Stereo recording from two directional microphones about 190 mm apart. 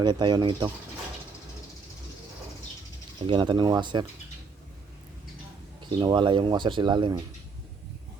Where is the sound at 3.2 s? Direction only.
25° right (ahead or behind).